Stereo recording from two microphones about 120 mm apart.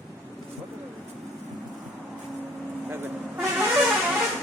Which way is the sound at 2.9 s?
15° right (ahead or behind).